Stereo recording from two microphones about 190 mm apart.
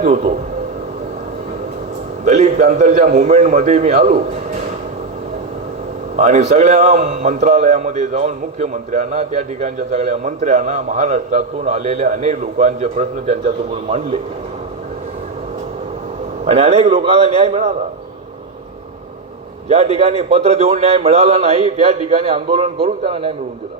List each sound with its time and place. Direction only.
0.0 s a man's voice: 40° right (ahead or behind)
2.2 s a man's voice: 40° right (ahead or behind)
6.1 s a man's voice: 40° right (ahead or behind)
16.5 s a man's voice: 35° right (ahead or behind)
19.6 s a man's voice: 35° right (ahead or behind)